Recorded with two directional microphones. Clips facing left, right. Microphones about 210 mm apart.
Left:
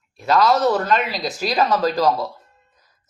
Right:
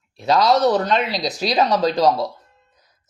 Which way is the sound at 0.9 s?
35° right (ahead or behind).